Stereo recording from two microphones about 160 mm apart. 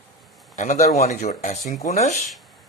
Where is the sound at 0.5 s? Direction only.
45° left (ahead or behind).